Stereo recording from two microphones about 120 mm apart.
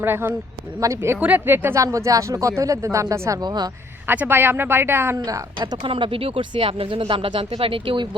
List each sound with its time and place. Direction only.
0.0 s speech: 15° right (ahead or behind); by 3.7 s 35° right (ahead or behind)
4.0 s speech: 15° right (ahead or behind)
5.5 s speech: 45° right (ahead or behind)